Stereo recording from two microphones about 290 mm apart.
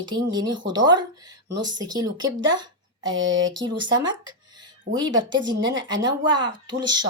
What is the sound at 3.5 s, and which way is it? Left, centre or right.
A woman's voice, centre.